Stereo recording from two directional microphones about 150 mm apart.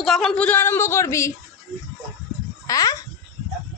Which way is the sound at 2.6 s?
25° left (ahead or behind).